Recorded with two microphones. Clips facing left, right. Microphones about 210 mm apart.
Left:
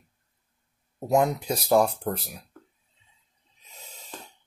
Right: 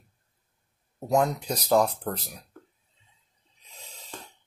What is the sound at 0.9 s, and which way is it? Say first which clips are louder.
Speech: left 2 dB; 10° left (ahead or behind).